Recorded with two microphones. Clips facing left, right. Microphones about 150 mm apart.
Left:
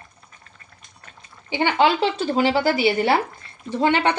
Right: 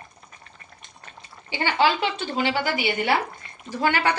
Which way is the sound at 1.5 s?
15° left (ahead or behind).